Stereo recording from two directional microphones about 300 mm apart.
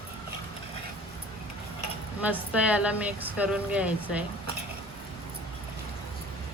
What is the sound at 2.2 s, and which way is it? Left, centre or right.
Speech, centre.